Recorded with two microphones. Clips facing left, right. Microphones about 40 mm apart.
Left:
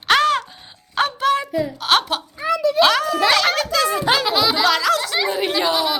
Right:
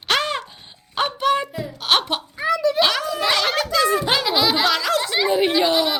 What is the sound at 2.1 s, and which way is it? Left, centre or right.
Speech, centre.